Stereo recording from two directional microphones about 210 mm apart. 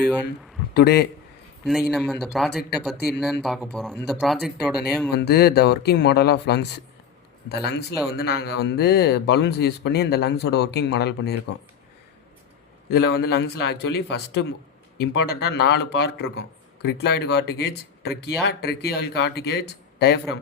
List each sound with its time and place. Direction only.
0.3 s a man's voice: 50° left (ahead or behind)
1.6 s speech: centre (ahead or behind)
5.1 s speech: 50° left (ahead or behind)
12.9 s speech: 50° left (ahead or behind)